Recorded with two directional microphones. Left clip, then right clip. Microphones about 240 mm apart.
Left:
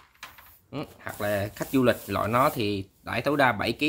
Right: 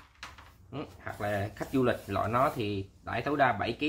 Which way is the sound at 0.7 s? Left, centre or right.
Left.